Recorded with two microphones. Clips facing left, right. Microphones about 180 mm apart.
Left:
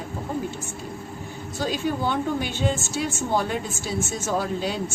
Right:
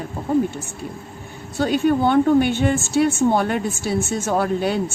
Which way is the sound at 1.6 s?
60° right (ahead or behind).